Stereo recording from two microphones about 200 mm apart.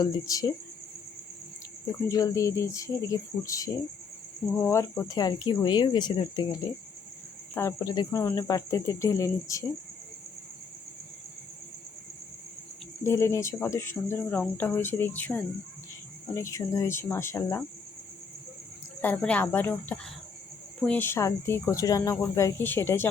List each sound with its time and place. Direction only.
0.0 s speech: 15° left (ahead or behind)
1.9 s speech: 15° left (ahead or behind)
13.1 s speech: 15° left (ahead or behind)
19.0 s speech: 5° left (ahead or behind)